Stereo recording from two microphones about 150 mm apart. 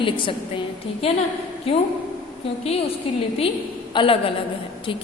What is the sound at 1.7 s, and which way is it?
Speech, 40° left (ahead or behind).